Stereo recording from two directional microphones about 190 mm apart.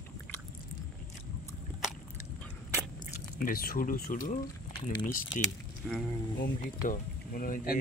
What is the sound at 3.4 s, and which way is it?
Speech, 50° left (ahead or behind).